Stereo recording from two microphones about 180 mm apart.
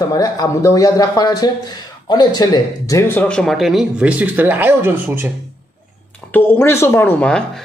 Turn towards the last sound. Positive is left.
turn(degrees=5)  # may be behind; listen again after turning